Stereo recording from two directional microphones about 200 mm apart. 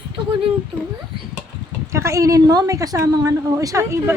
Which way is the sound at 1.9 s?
15° right (ahead or behind).